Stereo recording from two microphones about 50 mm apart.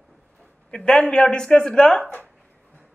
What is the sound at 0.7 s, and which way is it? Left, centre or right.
Speech, centre.